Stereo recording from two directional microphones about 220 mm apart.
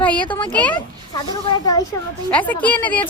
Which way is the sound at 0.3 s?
20° left (ahead or behind).